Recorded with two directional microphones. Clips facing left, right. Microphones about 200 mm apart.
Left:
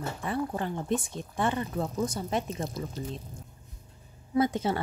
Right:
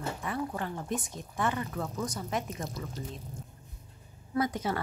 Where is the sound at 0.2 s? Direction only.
30° left (ahead or behind).